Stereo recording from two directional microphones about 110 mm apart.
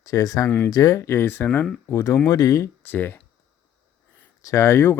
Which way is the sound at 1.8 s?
30° left (ahead or behind).